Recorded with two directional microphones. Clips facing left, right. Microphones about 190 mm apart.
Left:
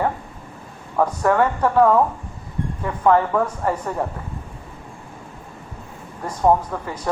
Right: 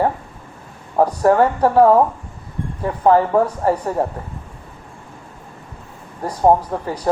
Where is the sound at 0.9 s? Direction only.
35° right (ahead or behind).